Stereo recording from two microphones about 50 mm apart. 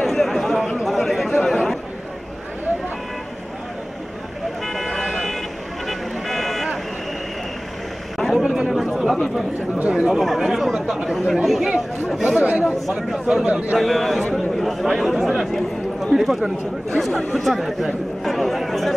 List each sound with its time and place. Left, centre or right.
0.0 s chatter: centre
4.6 s vehicle: centre
8.2 s a sound: centre
8.9 s chatter: centre
10.0 s speech: centre
13.5 s a man's voice: right
13.7 s speech: centre